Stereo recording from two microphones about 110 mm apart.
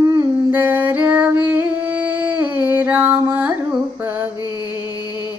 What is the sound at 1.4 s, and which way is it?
Music, 15° right (ahead or behind).